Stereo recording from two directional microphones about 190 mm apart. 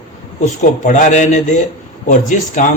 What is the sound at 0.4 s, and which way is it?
A man's voice, 40° left (ahead or behind).